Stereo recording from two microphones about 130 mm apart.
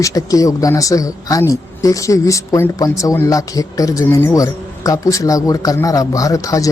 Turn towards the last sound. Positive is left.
turn(degrees=25)  # may be behind; listen again after turning